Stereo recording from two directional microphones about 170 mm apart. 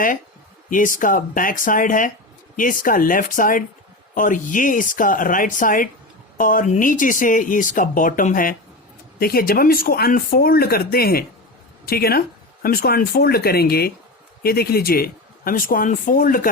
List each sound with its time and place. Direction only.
0.7 s speech: 50° left (ahead or behind)